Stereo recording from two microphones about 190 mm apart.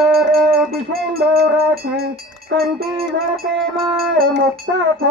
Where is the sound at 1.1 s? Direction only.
55° right (ahead or behind).